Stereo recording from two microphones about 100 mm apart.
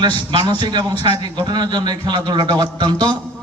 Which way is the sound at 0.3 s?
55° right (ahead or behind).